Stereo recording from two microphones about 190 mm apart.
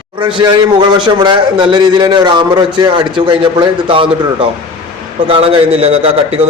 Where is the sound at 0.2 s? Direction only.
25° right (ahead or behind).